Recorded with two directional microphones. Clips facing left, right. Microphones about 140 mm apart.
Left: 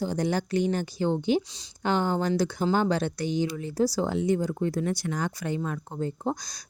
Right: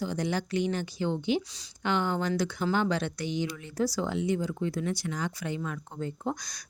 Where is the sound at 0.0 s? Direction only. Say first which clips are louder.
Left 3 dB; 40° left (ahead or behind).